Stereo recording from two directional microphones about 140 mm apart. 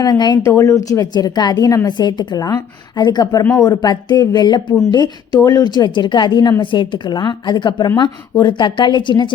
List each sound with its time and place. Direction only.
0.0 s a woman's voice: 30° left (ahead or behind)